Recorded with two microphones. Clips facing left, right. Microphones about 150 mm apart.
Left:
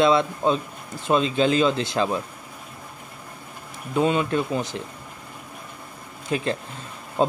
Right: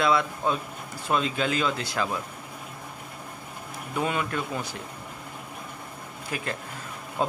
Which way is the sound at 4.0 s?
25° left (ahead or behind).